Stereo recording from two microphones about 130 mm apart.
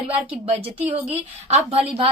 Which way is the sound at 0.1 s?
50° right (ahead or behind).